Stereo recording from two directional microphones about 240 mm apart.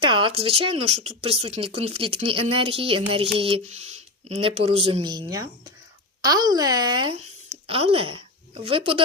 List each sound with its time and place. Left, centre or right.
0.0 s speech: right